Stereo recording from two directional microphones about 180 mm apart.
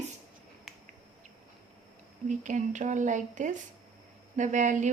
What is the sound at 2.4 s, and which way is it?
Speech, 45° right (ahead or behind).